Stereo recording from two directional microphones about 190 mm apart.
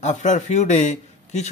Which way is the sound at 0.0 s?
40° left (ahead or behind).